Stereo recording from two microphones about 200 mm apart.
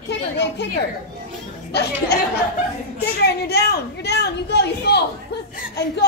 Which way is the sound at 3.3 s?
55° left (ahead or behind).